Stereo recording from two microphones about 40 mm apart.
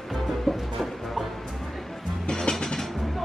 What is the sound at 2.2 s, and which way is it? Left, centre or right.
Music, left.